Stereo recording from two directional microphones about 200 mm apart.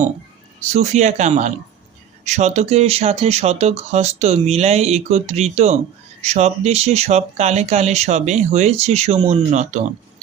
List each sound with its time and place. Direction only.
0.7 s speech: 35° right (ahead or behind)